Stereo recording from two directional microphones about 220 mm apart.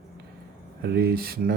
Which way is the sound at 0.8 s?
45° right (ahead or behind).